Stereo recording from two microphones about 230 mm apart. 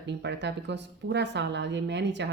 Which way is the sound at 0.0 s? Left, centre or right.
Right.